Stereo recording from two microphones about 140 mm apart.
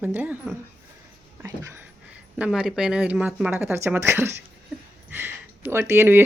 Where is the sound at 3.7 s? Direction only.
20° right (ahead or behind).